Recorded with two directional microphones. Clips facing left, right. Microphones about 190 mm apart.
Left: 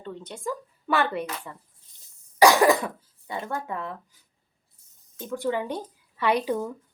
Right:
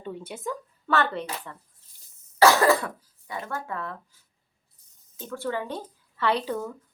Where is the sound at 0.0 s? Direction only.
10° right (ahead or behind).